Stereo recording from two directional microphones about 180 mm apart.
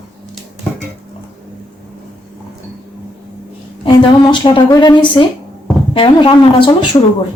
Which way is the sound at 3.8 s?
25° left (ahead or behind).